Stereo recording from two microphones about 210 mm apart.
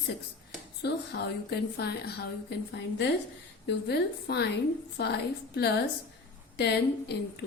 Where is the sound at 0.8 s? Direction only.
50° left (ahead or behind).